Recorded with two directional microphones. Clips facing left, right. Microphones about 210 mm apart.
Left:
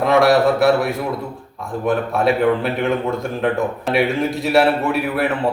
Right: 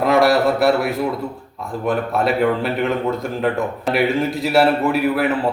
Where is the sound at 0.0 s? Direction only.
Centre (ahead or behind).